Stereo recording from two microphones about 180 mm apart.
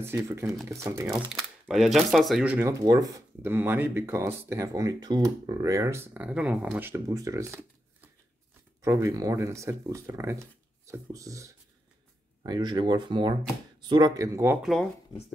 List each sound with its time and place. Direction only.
0.0 s speech: 15° right (ahead or behind)
1.7 s speech: centre (ahead or behind)
2.7 s speech: 20° right (ahead or behind)
14.6 s speech: centre (ahead or behind)